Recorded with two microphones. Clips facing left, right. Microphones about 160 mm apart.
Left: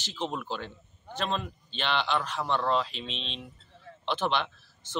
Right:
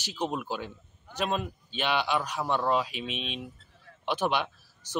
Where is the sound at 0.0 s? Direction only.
10° right (ahead or behind).